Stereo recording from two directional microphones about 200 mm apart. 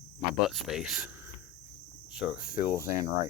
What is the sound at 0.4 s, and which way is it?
Speech, centre (ahead or behind).